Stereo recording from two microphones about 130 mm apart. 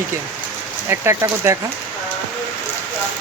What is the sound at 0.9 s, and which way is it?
Speech, 20° right (ahead or behind).